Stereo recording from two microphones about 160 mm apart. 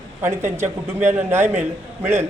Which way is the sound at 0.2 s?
15° right (ahead or behind).